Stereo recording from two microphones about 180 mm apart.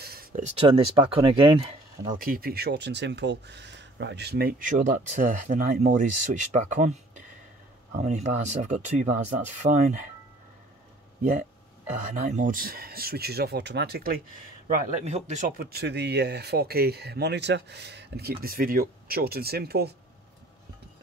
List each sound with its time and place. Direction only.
0.0 s speech: 55° right (ahead or behind); by 2.1 s 30° right (ahead or behind)
2.1 s speech: 50° right (ahead or behind)
12.1 s speech: 45° right (ahead or behind)
14.7 s speech: 45° right (ahead or behind); by 19.9 s 60° right (ahead or behind)